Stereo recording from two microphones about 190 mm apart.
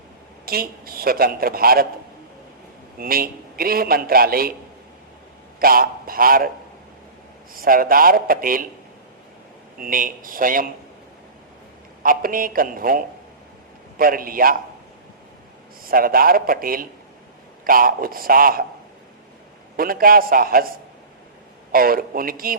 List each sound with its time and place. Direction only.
0.4 s a man's voice: 50° right (ahead or behind)
3.0 s a man's voice: 50° right (ahead or behind)
5.5 s a man's voice: 50° right (ahead or behind)
7.5 s a man's voice: 50° right (ahead or behind)
9.8 s a man's voice: 45° right (ahead or behind)
12.0 s a man's voice: 45° right (ahead or behind)
15.8 s a man's voice: 50° right (ahead or behind)
19.7 s a man's voice: 50° right (ahead or behind)
21.7 s a man's voice: 50° right (ahead or behind)